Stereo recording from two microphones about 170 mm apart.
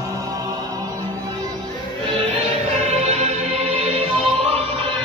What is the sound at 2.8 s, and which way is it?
Music, 40° right (ahead or behind).